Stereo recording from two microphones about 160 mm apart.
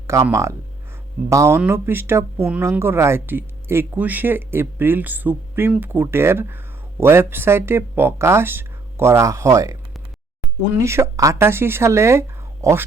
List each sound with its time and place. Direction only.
0.1 s speech: 20° right (ahead or behind)
10.8 s speech: 15° right (ahead or behind)